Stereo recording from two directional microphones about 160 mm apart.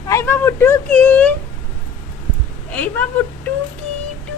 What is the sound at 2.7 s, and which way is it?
Speech, 10° left (ahead or behind).